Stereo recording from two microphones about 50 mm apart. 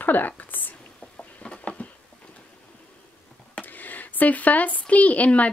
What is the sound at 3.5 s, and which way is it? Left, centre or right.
Speech, left.